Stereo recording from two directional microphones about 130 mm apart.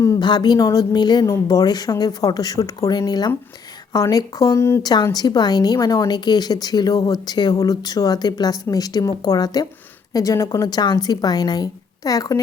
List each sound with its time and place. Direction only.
0.0 s a woman's voice: 30° left (ahead or behind)
4.8 s a woman's voice: 30° left (ahead or behind)